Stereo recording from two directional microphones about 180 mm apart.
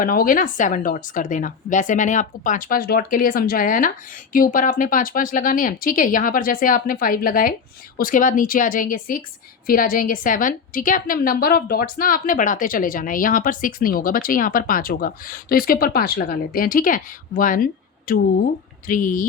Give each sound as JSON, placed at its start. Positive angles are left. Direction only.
{"t": 0.0, "sound": "a woman's voice", "side_deg": 50}